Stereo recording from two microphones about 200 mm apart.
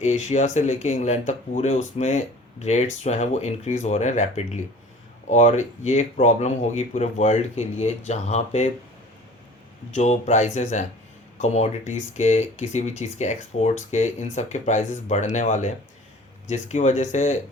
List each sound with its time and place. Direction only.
0.0 s speech: 35° left (ahead or behind)
9.9 s speech: 35° left (ahead or behind)